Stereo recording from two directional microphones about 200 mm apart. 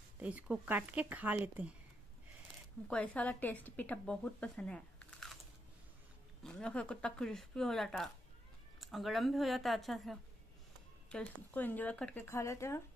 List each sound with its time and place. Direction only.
0.2 s speech: 5° right (ahead or behind)
2.9 s a woman's voice: 5° left (ahead or behind)
6.4 s a woman's voice: 5° left (ahead or behind)